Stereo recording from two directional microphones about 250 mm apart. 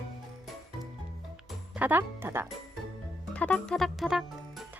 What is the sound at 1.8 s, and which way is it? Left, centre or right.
Speech, centre.